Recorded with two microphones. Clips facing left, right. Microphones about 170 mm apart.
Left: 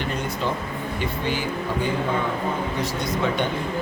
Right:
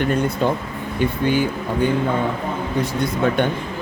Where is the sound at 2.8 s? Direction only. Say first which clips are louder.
Right 5 dB; 55° right (ahead or behind).